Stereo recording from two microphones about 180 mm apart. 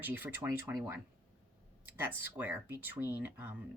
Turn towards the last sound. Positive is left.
turn(degrees=-10)  # may be behind; listen again after turning